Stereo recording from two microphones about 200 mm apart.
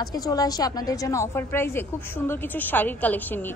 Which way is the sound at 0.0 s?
20° left (ahead or behind).